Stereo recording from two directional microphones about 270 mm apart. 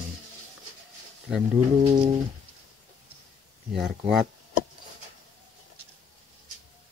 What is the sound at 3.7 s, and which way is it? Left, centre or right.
Speech, centre.